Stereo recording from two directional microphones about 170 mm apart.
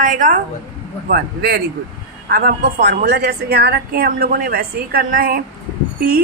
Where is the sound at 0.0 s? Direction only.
50° right (ahead or behind).